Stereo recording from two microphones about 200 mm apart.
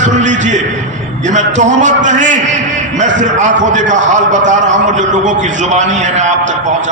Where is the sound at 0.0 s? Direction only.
35° right (ahead or behind).